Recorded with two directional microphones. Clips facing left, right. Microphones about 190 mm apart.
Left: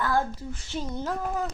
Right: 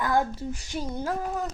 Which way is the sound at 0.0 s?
15° right (ahead or behind).